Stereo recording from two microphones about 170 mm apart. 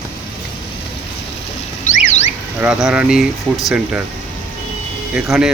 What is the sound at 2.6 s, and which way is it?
Speech, 5° right (ahead or behind).